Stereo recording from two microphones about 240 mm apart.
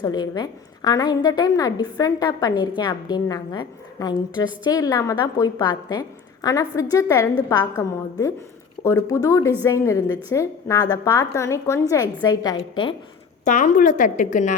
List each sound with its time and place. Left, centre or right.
0.0 s a woman's voice: centre
13.4 s a woman's voice: left